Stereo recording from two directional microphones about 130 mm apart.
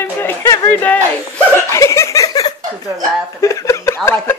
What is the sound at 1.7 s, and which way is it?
Laughter, 20° left (ahead or behind).